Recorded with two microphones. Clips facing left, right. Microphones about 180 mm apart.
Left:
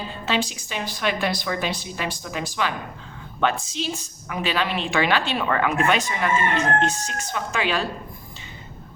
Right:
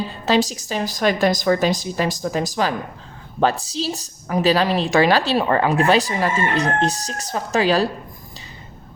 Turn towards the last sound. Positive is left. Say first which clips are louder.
# right 7 dB
turn(degrees=-35)  # may be behind; listen again after turning